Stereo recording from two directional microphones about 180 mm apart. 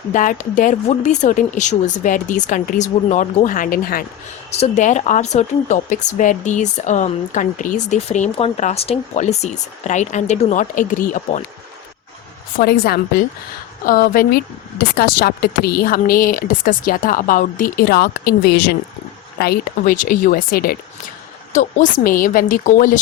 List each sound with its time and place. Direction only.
0.1 s speech: 45° left (ahead or behind)
4.5 s speech: 40° left (ahead or behind)
12.5 s a woman's voice: 60° left (ahead or behind)
21.5 s speech: 45° left (ahead or behind)